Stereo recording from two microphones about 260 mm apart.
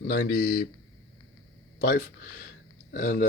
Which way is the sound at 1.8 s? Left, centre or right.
Left.